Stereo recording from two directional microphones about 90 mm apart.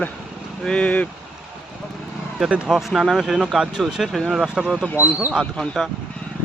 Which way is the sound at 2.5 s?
15° right (ahead or behind).